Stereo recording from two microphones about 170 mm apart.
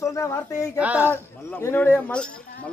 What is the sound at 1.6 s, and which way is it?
Speech, 10° left (ahead or behind).